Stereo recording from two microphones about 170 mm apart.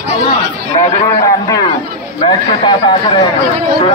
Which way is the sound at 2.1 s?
30° left (ahead or behind).